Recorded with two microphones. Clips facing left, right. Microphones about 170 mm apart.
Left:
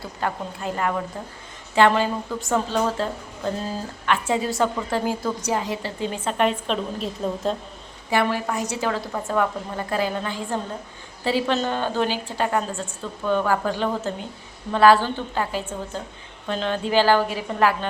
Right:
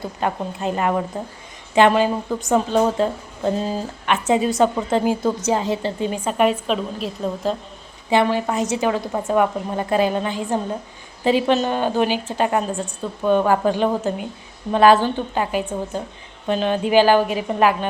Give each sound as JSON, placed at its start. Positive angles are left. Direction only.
{"t": 0.0, "sound": "a woman's voice", "side_deg": -20}
{"t": 6.2, "sound": "a woman's voice", "side_deg": -10}
{"t": 8.1, "sound": "a woman's voice", "side_deg": -20}